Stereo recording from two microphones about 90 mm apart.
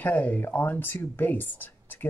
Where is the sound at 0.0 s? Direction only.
15° left (ahead or behind).